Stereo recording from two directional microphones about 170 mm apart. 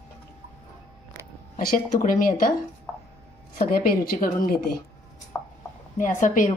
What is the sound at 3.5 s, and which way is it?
A woman's voice, 55° left (ahead or behind).